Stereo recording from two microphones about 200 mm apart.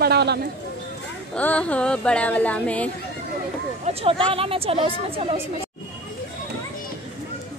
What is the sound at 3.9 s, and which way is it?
A woman's voice, 30° right (ahead or behind).